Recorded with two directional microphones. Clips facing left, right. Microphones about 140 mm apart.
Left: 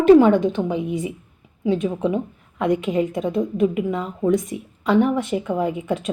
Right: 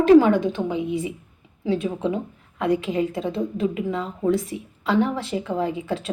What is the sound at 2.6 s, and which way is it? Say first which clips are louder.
A woman's voice: left 2 dB; 20° left (ahead or behind).